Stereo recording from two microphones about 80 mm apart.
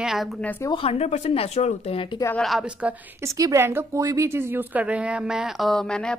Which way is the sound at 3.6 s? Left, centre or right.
Right.